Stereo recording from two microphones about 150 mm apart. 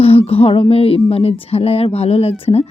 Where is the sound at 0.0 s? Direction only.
40° left (ahead or behind).